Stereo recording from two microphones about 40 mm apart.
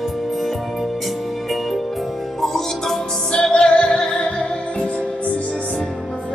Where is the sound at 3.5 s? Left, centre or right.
Left.